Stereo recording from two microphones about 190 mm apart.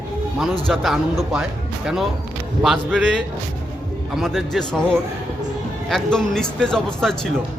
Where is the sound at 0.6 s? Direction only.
Centre (ahead or behind).